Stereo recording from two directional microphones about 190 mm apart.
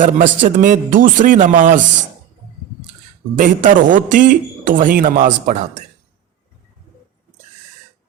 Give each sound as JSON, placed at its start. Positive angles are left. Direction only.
{"t": 0.0, "sound": "a man's voice", "side_deg": -45}
{"t": 3.3, "sound": "a man's voice", "side_deg": -45}